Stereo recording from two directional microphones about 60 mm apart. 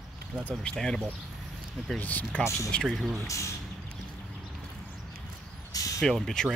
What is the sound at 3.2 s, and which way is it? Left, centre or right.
Speech, left.